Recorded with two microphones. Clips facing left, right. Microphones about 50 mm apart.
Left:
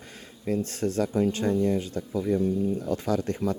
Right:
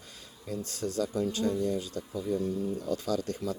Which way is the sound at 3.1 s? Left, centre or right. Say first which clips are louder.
Left 7 dB; left.